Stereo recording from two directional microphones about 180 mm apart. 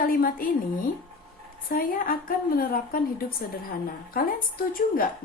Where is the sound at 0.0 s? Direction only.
50° left (ahead or behind).